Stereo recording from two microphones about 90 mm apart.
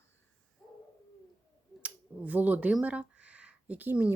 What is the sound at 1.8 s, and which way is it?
Speech, 15° right (ahead or behind).